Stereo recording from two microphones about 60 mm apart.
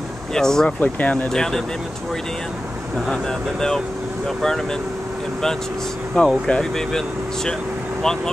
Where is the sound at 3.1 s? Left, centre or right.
Centre.